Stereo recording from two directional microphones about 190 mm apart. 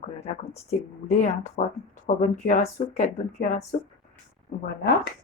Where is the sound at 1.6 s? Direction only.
40° left (ahead or behind).